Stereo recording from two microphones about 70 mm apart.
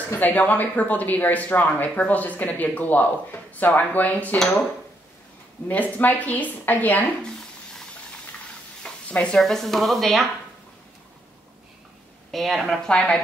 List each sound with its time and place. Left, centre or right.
0.1 s a man's voice: left
5.7 s a man's voice: left
9.1 s a woman's voice: centre
9.4 s speech: centre
12.3 s speech: centre
12.8 s a woman's voice: centre